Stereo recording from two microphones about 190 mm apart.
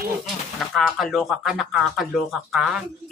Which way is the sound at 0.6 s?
Centre (ahead or behind).